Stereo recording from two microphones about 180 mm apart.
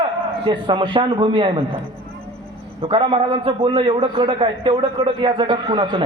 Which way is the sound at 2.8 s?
30° right (ahead or behind).